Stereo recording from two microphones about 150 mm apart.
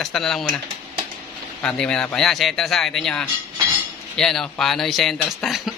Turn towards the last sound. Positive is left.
turn(degrees=0)  # may be behind; listen again after turning